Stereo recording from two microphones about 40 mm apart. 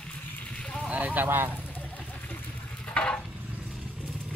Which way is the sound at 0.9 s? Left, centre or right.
Right.